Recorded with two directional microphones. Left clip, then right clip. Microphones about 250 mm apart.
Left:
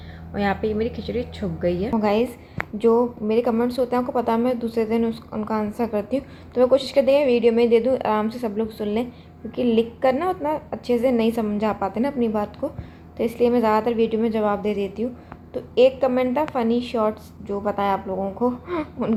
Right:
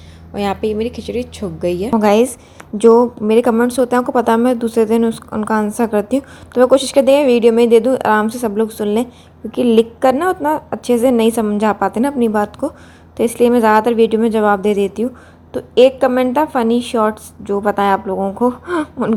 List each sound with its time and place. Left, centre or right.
0.3 s a woman's voice: right